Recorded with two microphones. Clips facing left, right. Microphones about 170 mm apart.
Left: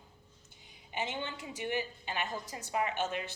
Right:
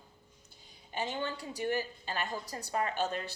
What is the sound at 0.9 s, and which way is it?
Speech, 20° left (ahead or behind).